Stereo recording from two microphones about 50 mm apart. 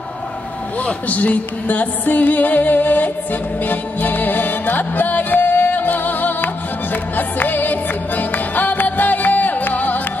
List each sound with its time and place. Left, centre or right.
0.8 s speech: left
3.6 s music: left